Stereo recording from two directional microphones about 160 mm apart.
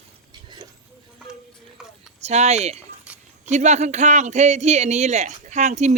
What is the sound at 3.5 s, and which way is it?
Speech, 45° right (ahead or behind).